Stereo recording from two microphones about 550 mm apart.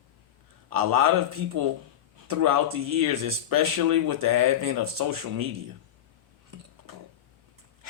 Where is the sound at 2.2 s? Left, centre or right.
Right.